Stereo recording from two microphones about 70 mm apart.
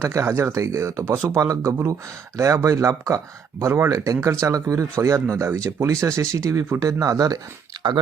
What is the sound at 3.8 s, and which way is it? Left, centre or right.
Speech, right.